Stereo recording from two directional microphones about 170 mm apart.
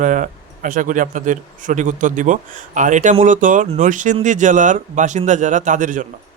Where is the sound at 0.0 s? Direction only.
50° right (ahead or behind).